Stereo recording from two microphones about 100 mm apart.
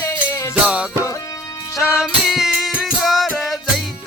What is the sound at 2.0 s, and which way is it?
Music, 5° right (ahead or behind).